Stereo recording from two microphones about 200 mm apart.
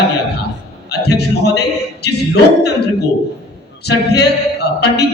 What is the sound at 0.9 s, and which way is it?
A man's voice, 55° left (ahead or behind).